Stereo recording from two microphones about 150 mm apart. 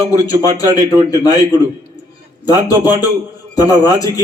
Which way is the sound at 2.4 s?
25° left (ahead or behind).